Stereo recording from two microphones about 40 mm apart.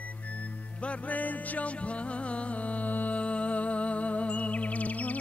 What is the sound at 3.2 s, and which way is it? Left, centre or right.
Music, left.